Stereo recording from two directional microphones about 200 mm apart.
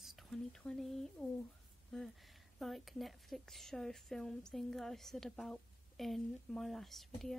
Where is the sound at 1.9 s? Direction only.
Centre (ahead or behind).